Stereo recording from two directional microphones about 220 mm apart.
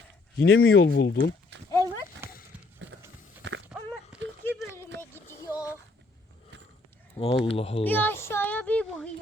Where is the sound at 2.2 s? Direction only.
10° right (ahead or behind).